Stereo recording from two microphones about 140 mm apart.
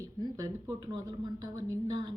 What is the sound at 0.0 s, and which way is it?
Speech, 25° right (ahead or behind).